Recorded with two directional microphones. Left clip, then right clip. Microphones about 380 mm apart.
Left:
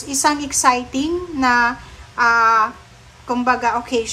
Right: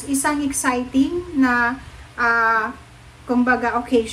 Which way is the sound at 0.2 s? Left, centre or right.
Centre.